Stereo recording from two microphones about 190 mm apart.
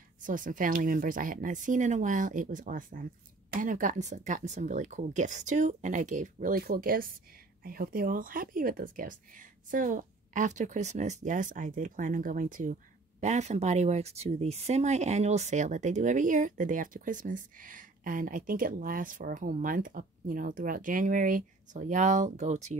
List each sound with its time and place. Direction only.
0.2 s a woman's voice: 45° right (ahead or behind)